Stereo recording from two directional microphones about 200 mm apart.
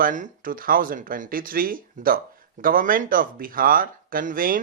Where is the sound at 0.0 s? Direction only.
40° right (ahead or behind).